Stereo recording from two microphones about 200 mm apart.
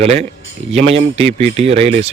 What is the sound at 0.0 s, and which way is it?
Speech, 35° right (ahead or behind).